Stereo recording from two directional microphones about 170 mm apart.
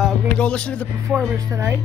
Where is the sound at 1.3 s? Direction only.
15° right (ahead or behind).